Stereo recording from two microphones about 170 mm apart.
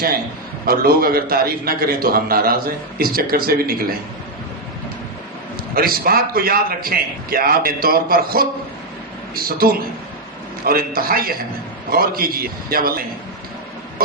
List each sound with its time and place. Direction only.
0.6 s a man's voice: 60° right (ahead or behind)
5.7 s a man's voice: 60° right (ahead or behind)